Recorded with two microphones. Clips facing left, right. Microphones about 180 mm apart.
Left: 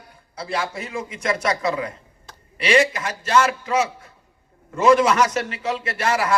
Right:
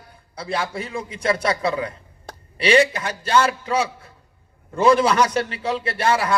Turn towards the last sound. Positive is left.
turn(degrees=-30)  # may be behind; listen again after turning